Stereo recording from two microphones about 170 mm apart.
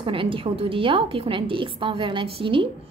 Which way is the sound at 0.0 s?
30° right (ahead or behind).